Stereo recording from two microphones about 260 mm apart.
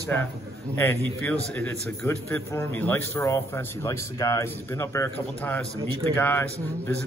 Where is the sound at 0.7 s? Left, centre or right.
Centre.